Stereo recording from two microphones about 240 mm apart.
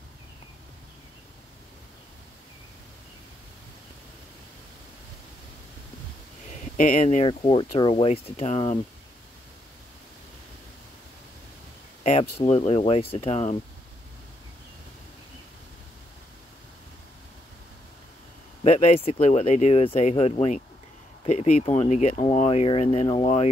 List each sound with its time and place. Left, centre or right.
6.8 s speech: left
12.0 s speech: left
18.6 s speech: left